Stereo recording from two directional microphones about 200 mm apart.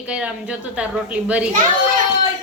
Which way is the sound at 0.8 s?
5° right (ahead or behind).